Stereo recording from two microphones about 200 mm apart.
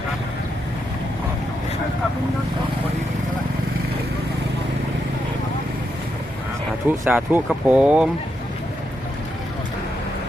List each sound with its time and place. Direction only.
7.0 s speech: 5° right (ahead or behind)